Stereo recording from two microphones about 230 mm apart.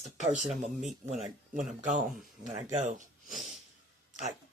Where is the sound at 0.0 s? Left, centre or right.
Right.